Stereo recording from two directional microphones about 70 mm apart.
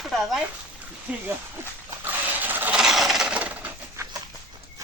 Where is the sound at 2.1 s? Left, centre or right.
Right.